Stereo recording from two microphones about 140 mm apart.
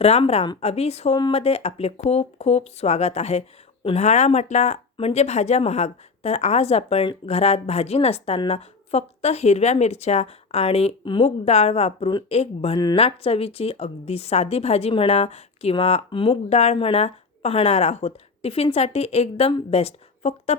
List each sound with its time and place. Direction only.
0.0 s speech: 50° left (ahead or behind)